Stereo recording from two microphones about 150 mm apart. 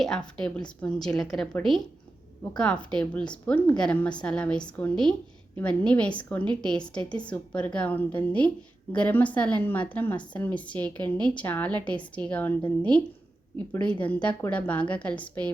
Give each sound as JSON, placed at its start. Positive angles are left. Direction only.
{"t": 0.0, "sound": "a woman's voice", "side_deg": 5}